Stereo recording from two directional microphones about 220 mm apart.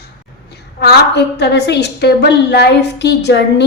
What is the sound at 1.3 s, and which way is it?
A woman's voice, 50° left (ahead or behind).